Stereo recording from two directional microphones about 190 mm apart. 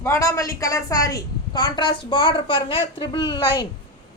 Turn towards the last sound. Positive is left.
turn(degrees=20)  # may be behind; listen again after turning